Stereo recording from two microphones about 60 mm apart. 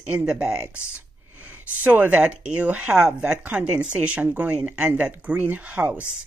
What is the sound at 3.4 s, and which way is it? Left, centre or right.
Speech, right.